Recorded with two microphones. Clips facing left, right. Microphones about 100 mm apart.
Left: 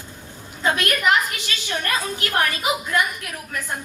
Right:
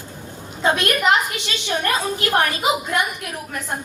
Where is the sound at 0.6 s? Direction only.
25° right (ahead or behind).